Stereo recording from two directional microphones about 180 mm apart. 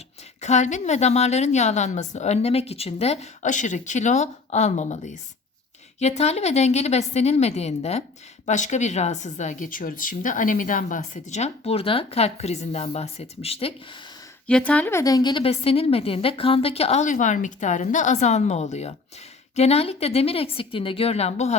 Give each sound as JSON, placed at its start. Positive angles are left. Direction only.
{"t": 0.4, "sound": "speech", "side_deg": 40}
{"t": 14.4, "sound": "speech", "side_deg": 5}